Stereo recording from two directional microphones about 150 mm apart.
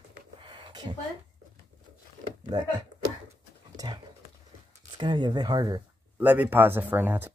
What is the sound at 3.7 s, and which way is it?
Dog, 25° right (ahead or behind).